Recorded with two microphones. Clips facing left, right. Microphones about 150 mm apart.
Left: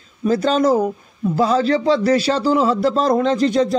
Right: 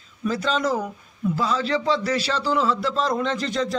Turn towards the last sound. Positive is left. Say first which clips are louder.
# left 8 dB
turn(degrees=40)  # may be behind; listen again after turning